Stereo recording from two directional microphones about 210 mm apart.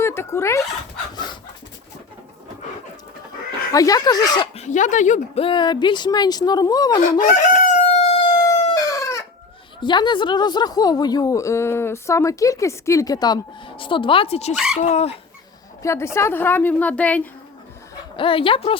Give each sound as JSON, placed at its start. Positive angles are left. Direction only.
{"t": 0.0, "sound": "speech", "side_deg": 10}
{"t": 1.1, "sound": "dog", "side_deg": 20}
{"t": 3.7, "sound": "speech", "side_deg": 15}
{"t": 7.2, "sound": "crowing", "side_deg": 40}
{"t": 8.9, "sound": "chicken", "side_deg": 15}
{"t": 9.8, "sound": "speech", "side_deg": 20}
{"t": 14.5, "sound": "speech", "side_deg": -5}
{"t": 14.8, "sound": "speech", "side_deg": 30}
{"t": 15.8, "sound": "a woman's voice", "side_deg": 15}
{"t": 18.2, "sound": "speech", "side_deg": 25}